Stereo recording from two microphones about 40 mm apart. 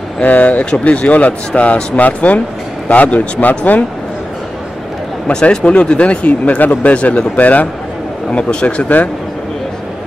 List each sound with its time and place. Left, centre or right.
0.2 s speech: left
2.0 s a man's voice: left
5.3 s a man's voice: left
8.3 s speech: left
8.8 s a man's voice: left